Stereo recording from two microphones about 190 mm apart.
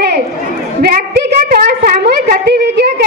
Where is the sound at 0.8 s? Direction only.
50° right (ahead or behind).